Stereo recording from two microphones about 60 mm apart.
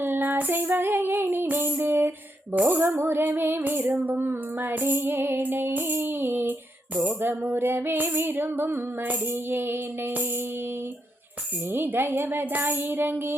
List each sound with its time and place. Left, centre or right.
0.0 s female singing: right
11.7 s female singing: right